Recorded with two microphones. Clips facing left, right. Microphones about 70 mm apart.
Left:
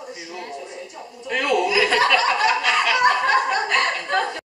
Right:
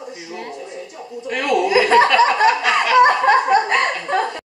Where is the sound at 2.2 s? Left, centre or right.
Right.